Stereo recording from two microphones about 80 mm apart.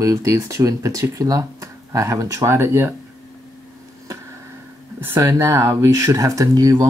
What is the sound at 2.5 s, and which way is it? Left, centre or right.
Speech, right.